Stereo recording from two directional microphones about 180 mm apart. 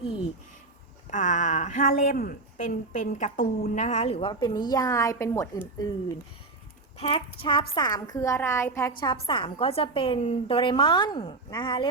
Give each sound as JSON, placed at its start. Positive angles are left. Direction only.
{"t": 1.0, "sound": "a woman's voice", "side_deg": 45}
{"t": 7.0, "sound": "a woman's voice", "side_deg": 30}
{"t": 9.2, "sound": "a woman's voice", "side_deg": 30}